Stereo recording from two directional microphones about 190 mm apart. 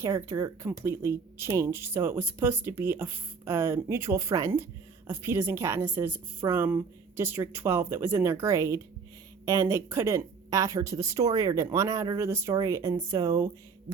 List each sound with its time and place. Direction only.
0.0 s speech: 15° right (ahead or behind)